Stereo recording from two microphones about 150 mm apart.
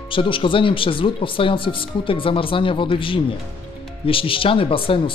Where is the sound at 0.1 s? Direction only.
35° left (ahead or behind).